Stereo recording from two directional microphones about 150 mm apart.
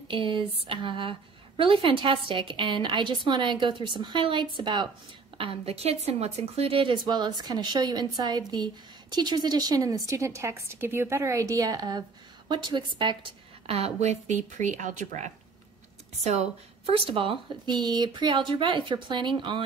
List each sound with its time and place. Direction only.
0.1 s a woman's voice: 35° right (ahead or behind); by 15.3 s 55° right (ahead or behind)
16.3 s a woman's voice: 45° right (ahead or behind)